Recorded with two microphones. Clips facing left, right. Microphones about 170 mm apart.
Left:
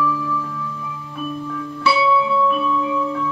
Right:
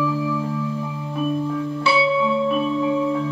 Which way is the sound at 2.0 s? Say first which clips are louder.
Left 1 dB; 35° right (ahead or behind).